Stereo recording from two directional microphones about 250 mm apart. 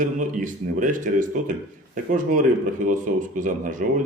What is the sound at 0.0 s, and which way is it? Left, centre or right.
A man's voice, right.